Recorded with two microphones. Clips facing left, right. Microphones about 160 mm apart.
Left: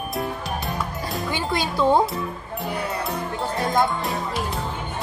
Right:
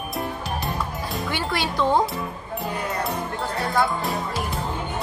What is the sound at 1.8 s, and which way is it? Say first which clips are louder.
Speech: left 2 dB; 10° left (ahead or behind).